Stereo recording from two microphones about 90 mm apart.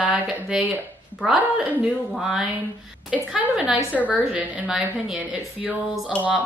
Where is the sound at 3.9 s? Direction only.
5° left (ahead or behind).